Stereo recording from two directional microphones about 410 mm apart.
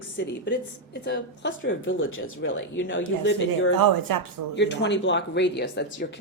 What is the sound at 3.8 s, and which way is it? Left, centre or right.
Speech, right.